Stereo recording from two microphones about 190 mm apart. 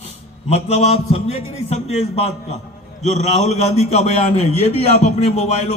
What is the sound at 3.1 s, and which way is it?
A man's voice, 35° left (ahead or behind).